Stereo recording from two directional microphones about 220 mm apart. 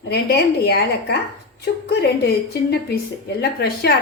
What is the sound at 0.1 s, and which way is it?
Speech, 50° left (ahead or behind).